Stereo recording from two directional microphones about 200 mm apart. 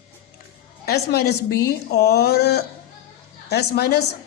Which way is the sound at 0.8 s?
55° left (ahead or behind).